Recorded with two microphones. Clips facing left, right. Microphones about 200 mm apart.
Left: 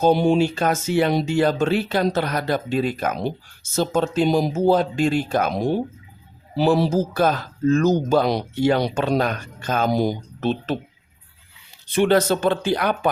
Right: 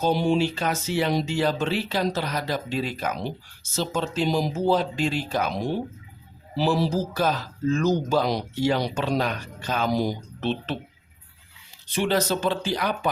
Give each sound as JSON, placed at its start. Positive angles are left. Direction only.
{"t": 0.0, "sound": "speech", "side_deg": 50}
{"t": 11.9, "sound": "speech", "side_deg": 55}